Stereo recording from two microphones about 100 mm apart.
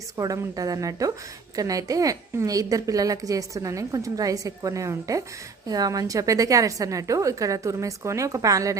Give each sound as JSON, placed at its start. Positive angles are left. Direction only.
{"t": 0.2, "sound": "a woman's voice", "side_deg": -40}